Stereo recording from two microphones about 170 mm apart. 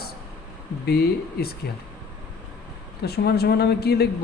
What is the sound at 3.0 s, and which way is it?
Speech, 70° left (ahead or behind).